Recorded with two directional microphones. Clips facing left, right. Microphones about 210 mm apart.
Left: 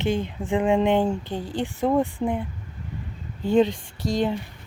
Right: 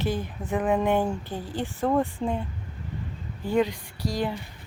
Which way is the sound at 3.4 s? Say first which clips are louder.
Left 5 dB; 25° left (ahead or behind).